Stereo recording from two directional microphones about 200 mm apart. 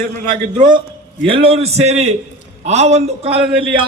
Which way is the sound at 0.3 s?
35° right (ahead or behind).